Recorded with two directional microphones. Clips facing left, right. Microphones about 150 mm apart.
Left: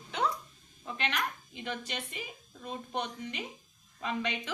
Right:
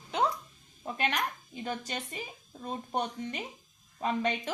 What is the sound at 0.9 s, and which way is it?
A woman's voice, 40° right (ahead or behind).